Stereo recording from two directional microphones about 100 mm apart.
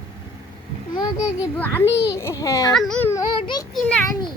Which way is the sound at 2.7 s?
5° left (ahead or behind).